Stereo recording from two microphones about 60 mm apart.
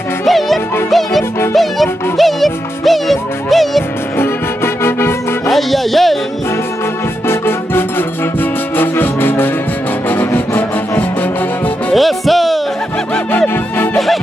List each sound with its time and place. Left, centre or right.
0.2 s music: centre
5.5 s music: centre
7.2 s music: left
11.9 s music: centre
13.9 s music: centre